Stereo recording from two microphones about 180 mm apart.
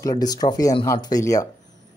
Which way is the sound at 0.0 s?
20° left (ahead or behind).